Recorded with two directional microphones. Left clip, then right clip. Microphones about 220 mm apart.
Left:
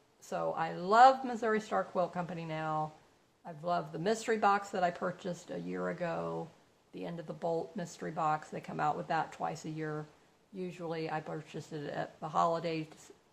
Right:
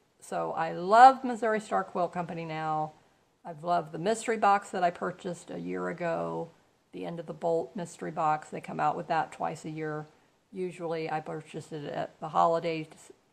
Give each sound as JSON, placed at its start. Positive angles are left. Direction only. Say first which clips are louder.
{"t": 0.3, "sound": "a woman's voice", "louder": "right 3 dB", "side_deg": -40}